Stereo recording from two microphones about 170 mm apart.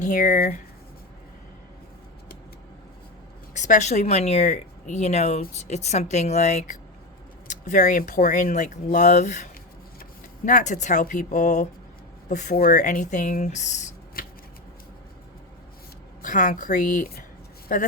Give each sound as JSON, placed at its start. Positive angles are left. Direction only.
{"t": 0.0, "sound": "speech", "side_deg": 50}
{"t": 3.5, "sound": "speech", "side_deg": 45}
{"t": 12.5, "sound": "speech", "side_deg": 55}
{"t": 14.2, "sound": "scissors", "side_deg": 60}
{"t": 16.2, "sound": "speech", "side_deg": 50}